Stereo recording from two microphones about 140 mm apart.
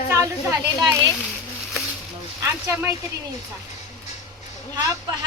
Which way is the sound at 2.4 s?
20° right (ahead or behind).